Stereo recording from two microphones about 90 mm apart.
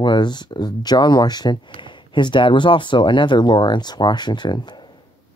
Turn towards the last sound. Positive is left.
turn(degrees=55)  # may be behind; listen again after turning